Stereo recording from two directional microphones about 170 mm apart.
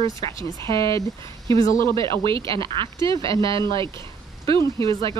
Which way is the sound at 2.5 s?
30° right (ahead or behind).